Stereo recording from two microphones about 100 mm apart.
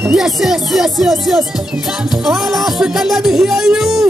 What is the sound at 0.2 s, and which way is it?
Music, 5° right (ahead or behind).